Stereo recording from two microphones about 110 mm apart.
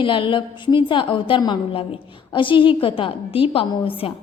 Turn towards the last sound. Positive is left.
turn(degrees=55)  # may be behind; listen again after turning